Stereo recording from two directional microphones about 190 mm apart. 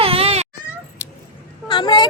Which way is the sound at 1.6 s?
25° left (ahead or behind).